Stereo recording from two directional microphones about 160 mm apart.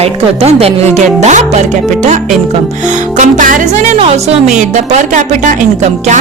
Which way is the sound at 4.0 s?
40° right (ahead or behind).